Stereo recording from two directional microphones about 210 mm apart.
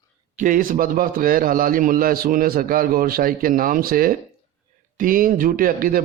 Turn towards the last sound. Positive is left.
turn(degrees=-40)  # may be behind; listen again after turning